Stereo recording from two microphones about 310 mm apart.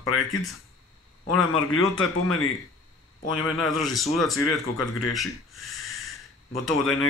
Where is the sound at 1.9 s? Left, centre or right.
Left.